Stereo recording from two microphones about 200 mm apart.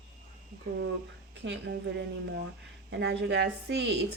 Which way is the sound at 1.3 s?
60° right (ahead or behind).